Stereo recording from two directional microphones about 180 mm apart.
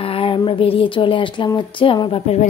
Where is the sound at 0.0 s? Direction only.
30° left (ahead or behind).